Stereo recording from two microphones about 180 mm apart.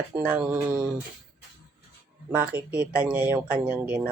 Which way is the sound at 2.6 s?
5° right (ahead or behind).